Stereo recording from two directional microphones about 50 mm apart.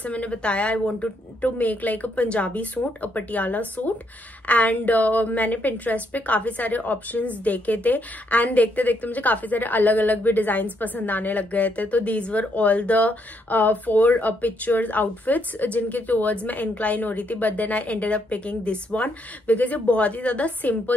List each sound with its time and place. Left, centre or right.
0.0 s a woman's voice: left